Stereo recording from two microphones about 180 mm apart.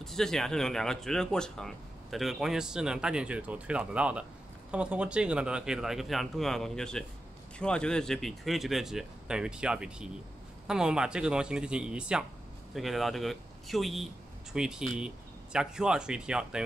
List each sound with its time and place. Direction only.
0.0 s speech: centre (ahead or behind)